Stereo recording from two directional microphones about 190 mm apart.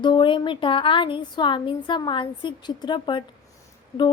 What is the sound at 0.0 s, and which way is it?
Speech, 25° left (ahead or behind).